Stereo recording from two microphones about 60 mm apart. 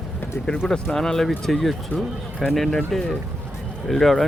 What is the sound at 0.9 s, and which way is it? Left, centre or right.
Speech, centre.